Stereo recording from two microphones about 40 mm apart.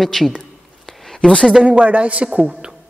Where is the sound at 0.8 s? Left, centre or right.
Centre.